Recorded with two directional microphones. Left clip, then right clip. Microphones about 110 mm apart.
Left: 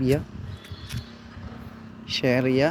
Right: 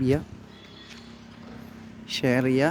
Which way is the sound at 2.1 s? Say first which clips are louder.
Left 1 dB; 30° right (ahead or behind).